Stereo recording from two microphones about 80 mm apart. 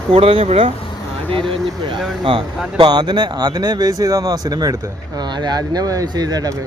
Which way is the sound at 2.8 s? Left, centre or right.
Right.